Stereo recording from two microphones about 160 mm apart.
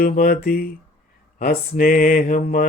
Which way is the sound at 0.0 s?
70° left (ahead or behind).